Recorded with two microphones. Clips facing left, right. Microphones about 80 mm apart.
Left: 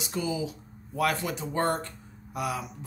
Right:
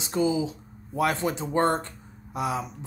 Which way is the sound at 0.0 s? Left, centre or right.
Right.